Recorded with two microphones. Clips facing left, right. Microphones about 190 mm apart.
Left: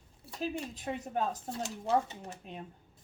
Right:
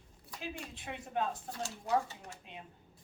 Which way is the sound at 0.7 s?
40° left (ahead or behind).